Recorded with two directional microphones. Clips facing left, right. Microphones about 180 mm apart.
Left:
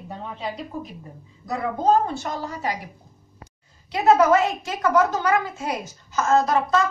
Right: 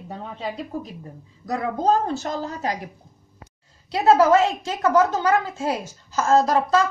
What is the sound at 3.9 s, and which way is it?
A woman's voice, 30° right (ahead or behind).